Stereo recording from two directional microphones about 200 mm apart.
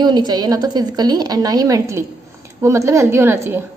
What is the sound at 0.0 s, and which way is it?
A woman's voice, 20° right (ahead or behind).